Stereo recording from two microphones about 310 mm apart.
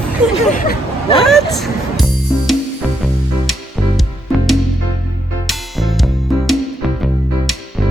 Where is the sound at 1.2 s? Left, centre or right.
Centre.